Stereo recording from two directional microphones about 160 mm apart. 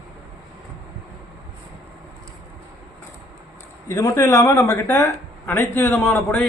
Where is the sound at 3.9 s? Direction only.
20° left (ahead or behind).